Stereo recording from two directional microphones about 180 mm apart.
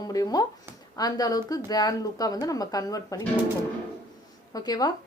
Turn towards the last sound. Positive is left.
turn(degrees=20)  # may be behind; listen again after turning